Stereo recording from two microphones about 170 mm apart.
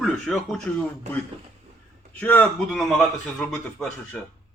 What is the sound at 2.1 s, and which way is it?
A man's voice, 10° left (ahead or behind).